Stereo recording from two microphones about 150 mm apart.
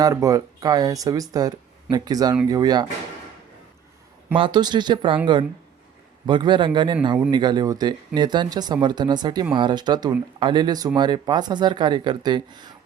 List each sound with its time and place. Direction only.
0.0 s speech: 20° right (ahead or behind)
4.4 s speech: 30° right (ahead or behind)